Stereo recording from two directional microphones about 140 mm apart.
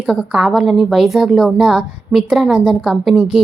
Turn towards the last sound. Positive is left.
turn(degrees=-5)  # may be behind; listen again after turning